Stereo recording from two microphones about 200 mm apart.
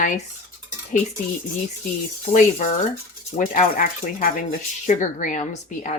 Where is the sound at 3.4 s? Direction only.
40° left (ahead or behind).